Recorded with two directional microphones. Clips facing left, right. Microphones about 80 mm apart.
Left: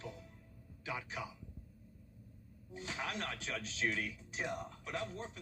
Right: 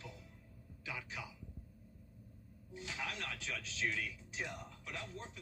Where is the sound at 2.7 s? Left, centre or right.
Left.